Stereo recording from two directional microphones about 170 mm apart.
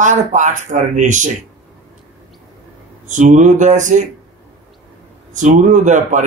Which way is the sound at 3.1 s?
45° right (ahead or behind).